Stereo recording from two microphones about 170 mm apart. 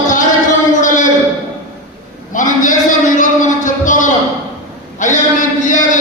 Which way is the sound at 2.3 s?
50° left (ahead or behind).